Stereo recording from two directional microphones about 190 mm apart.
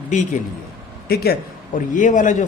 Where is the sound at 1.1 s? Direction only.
55° left (ahead or behind).